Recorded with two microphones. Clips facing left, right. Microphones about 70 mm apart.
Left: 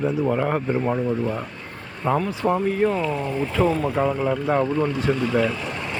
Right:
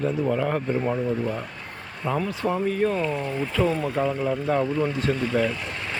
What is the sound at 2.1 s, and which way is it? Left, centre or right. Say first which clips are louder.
Speech: left 5 dB; left.